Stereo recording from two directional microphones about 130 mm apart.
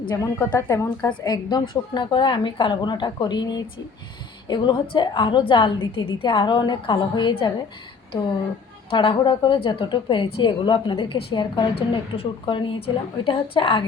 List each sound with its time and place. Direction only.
0.2 s a woman's voice: 25° left (ahead or behind)
8.9 s a woman's voice: 40° left (ahead or behind)